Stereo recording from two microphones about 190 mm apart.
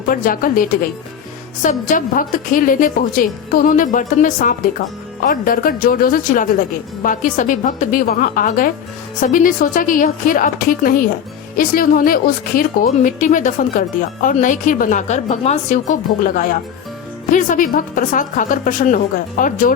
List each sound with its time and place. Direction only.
0.1 s a woman's voice: 50° left (ahead or behind)